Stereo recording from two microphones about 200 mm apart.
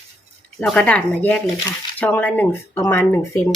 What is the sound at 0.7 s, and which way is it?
Speech, 5° left (ahead or behind).